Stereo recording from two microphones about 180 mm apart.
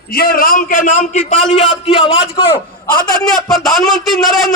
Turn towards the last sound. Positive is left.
turn(degrees=0)  # may be behind; listen again after turning